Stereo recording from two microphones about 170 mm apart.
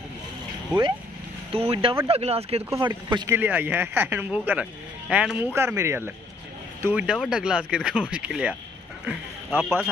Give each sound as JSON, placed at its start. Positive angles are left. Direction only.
{"t": 1.5, "sound": "speech", "side_deg": -35}
{"t": 2.7, "sound": "speech", "side_deg": -20}
{"t": 3.3, "sound": "speech", "side_deg": -10}